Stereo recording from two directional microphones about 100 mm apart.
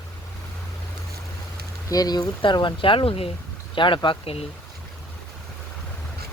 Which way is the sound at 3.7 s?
55° left (ahead or behind).